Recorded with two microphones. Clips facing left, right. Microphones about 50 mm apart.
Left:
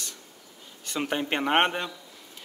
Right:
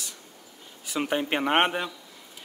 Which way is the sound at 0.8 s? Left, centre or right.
Centre.